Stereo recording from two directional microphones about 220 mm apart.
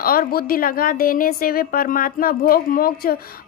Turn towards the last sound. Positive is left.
turn(degrees=45)  # may be behind; listen again after turning